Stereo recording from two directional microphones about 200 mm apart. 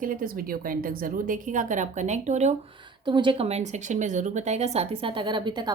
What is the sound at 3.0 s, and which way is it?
A woman's voice, 25° right (ahead or behind).